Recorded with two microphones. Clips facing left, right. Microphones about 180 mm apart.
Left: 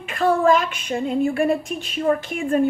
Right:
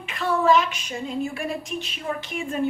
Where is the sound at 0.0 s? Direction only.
50° left (ahead or behind).